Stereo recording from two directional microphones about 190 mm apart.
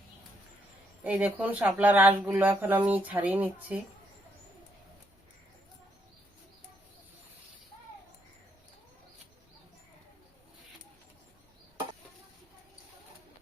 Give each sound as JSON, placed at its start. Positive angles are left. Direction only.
{"t": 1.0, "sound": "speech", "side_deg": -10}